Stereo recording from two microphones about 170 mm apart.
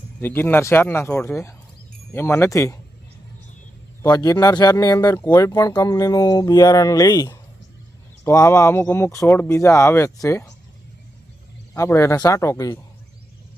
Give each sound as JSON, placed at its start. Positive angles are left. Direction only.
{"t": 0.2, "sound": "speech", "side_deg": 10}
{"t": 4.0, "sound": "speech", "side_deg": 20}
{"t": 11.7, "sound": "speech", "side_deg": 15}